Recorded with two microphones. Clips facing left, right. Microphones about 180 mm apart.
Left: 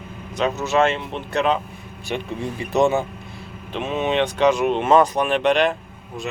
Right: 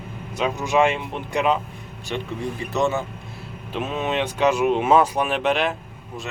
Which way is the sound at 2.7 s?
15° left (ahead or behind).